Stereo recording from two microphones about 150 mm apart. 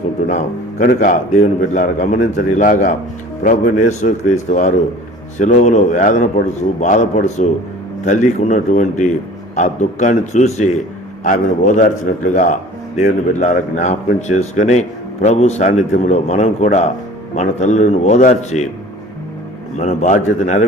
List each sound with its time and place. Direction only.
0.3 s a man's voice: 55° left (ahead or behind)
19.7 s speech: 50° left (ahead or behind)